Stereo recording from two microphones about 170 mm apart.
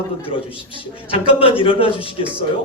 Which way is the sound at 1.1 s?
30° left (ahead or behind).